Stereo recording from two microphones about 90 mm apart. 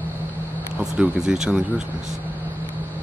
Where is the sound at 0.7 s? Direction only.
10° right (ahead or behind).